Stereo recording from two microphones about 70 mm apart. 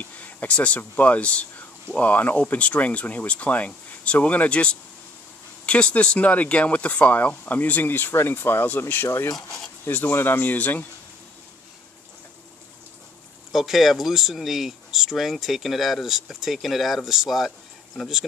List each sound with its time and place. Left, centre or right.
0.0 s speech: left
13.5 s speech: centre